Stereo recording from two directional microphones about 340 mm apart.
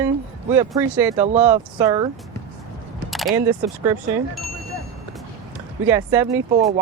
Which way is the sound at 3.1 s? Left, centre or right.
Centre.